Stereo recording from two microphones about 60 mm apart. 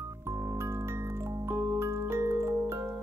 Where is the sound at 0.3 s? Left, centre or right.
Right.